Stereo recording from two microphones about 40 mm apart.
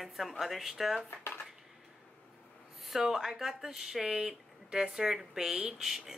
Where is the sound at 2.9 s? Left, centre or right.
Centre.